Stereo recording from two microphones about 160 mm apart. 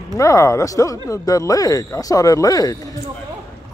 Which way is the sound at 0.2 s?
20° left (ahead or behind).